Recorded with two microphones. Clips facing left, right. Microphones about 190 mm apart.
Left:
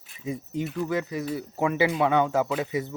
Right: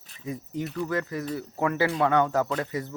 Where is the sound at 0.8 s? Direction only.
15° left (ahead or behind).